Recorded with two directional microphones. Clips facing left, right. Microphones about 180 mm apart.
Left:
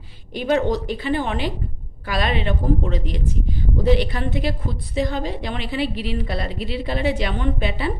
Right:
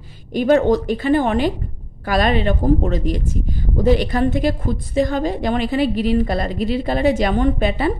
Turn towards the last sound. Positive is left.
turn(degrees=-45)  # may be behind; listen again after turning